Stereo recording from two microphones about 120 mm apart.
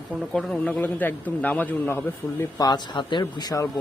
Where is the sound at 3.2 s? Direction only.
30° left (ahead or behind).